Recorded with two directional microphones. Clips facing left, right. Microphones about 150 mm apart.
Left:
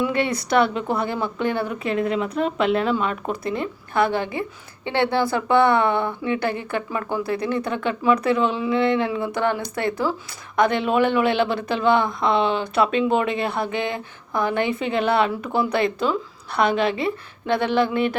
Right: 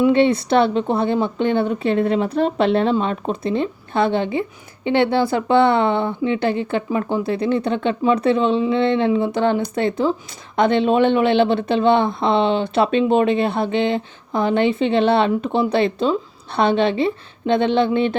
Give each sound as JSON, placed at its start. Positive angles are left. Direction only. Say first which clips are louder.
{"t": 0.0, "sound": "speech", "louder": "right 8 dB", "side_deg": -25}